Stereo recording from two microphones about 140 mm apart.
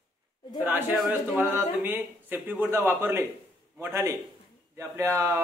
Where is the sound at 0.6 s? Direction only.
15° right (ahead or behind).